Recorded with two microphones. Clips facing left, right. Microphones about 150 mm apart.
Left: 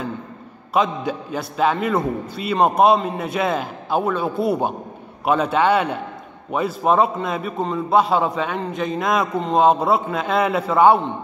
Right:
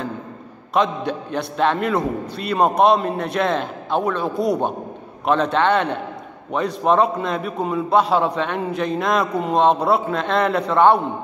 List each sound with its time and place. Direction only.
0.7 s a man's voice: 5° left (ahead or behind)